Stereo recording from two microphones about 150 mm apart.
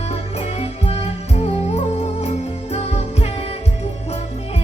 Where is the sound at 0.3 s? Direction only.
45° left (ahead or behind).